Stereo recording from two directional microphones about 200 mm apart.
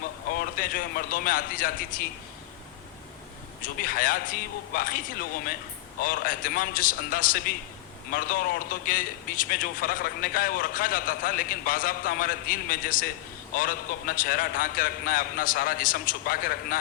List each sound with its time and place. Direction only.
0.3 s a man's voice: 45° left (ahead or behind)
3.6 s a man's voice: 45° left (ahead or behind)
6.0 s a man's voice: 45° left (ahead or behind)